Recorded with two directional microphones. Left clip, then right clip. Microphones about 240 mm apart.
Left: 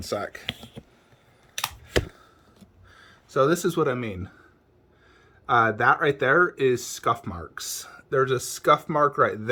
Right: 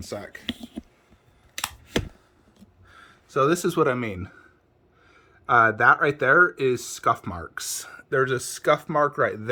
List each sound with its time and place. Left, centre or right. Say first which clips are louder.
0.0 s speech: left 4 dB; centre
2.9 s speech: even; centre
5.5 s speech: right 3 dB; centre